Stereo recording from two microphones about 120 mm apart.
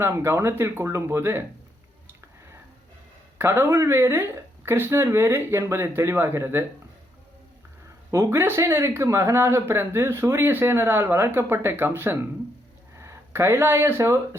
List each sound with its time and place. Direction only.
0.0 s speech: 20° right (ahead or behind)
3.3 s speech: 20° right (ahead or behind)
8.1 s speech: 20° right (ahead or behind)